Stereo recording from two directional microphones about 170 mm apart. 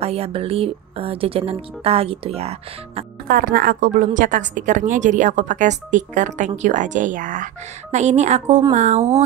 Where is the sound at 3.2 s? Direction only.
60° right (ahead or behind); by 9.2 s 40° right (ahead or behind).